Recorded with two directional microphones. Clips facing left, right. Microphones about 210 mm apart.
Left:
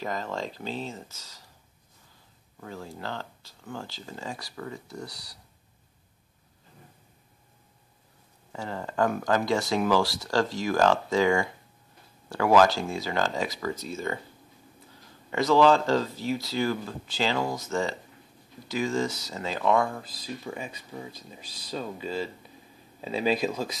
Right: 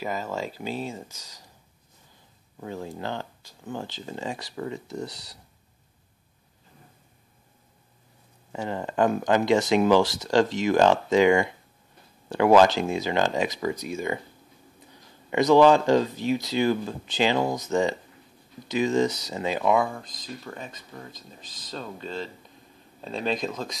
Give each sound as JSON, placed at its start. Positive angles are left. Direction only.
{"t": 0.0, "sound": "speech", "side_deg": -5}
{"t": 2.6, "sound": "speech", "side_deg": -20}
{"t": 8.5, "sound": "speech", "side_deg": -20}
{"t": 15.2, "sound": "speech", "side_deg": -20}